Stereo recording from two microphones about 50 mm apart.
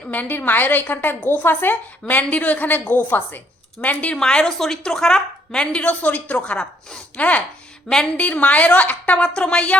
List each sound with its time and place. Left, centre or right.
0.1 s a woman's voice: left
4.2 s a woman's voice: centre
7.2 s a woman's voice: left